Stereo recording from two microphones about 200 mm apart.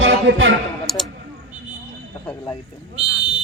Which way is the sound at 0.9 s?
Centre (ahead or behind).